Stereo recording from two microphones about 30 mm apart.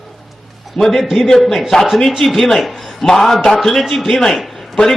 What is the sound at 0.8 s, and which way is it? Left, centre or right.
Speech, left.